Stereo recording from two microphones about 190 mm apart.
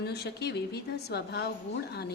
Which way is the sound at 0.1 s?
60° left (ahead or behind).